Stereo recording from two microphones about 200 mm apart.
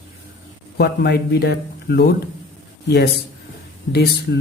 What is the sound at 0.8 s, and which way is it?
A man's voice, 55° left (ahead or behind).